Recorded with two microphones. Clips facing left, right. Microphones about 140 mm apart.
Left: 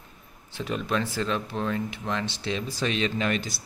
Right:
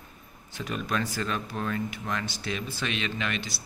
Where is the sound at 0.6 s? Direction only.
25° left (ahead or behind).